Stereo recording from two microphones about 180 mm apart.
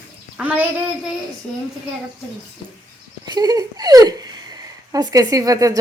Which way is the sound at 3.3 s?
20° right (ahead or behind).